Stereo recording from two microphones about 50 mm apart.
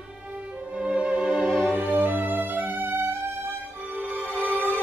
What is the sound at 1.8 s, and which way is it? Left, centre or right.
Music, right.